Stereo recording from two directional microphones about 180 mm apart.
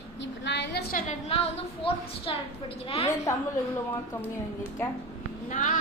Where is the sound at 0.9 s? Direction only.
40° left (ahead or behind).